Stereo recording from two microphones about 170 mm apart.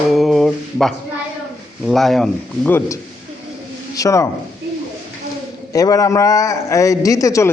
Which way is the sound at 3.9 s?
20° left (ahead or behind).